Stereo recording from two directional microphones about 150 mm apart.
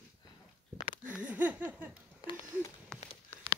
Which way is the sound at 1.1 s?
10° right (ahead or behind).